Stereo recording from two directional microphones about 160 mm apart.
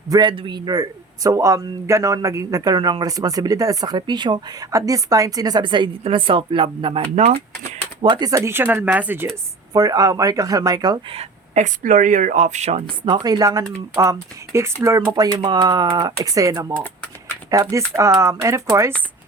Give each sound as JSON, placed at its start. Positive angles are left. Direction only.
{"t": 0.1, "sound": "a man's voice", "side_deg": -30}
{"t": 8.0, "sound": "speech", "side_deg": -30}
{"t": 9.7, "sound": "speech", "side_deg": -25}
{"t": 13.1, "sound": "a man's voice", "side_deg": -25}